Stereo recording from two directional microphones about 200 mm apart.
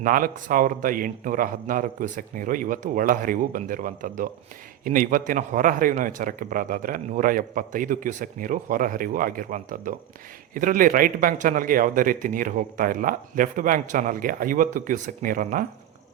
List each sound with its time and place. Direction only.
0.0 s a man's voice: 45° right (ahead or behind)